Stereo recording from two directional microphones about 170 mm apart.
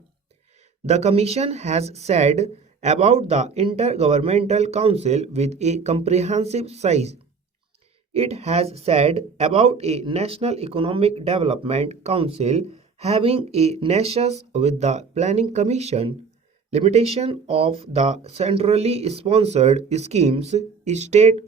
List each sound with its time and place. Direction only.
0.9 s speech: 40° right (ahead or behind)